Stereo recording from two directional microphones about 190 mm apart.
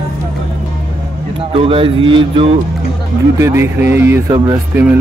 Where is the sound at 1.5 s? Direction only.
30° right (ahead or behind).